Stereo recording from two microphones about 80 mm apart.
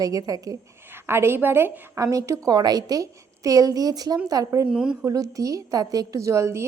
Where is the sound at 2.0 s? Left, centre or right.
Right.